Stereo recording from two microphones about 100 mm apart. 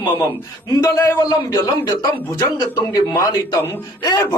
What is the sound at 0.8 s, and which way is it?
A man's voice, 35° left (ahead or behind).